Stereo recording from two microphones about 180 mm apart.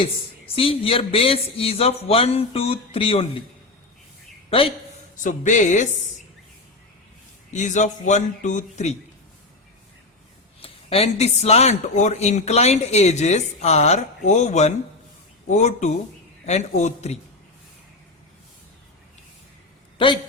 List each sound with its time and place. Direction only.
0.0 s speech: 30° left (ahead or behind)
4.4 s a man's voice: 30° left (ahead or behind)
5.2 s speech: 45° left (ahead or behind)
7.5 s speech: 40° left (ahead or behind)
10.6 s speech: 30° left (ahead or behind)